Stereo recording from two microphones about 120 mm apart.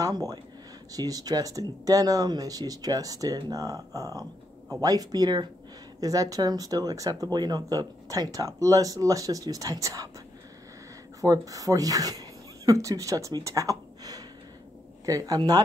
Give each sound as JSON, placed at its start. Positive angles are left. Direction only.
{"t": 0.0, "sound": "speech", "side_deg": -30}
{"t": 11.1, "sound": "speech", "side_deg": -30}